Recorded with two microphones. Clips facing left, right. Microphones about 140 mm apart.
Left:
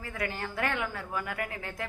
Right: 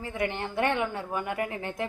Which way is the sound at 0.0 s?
25° right (ahead or behind).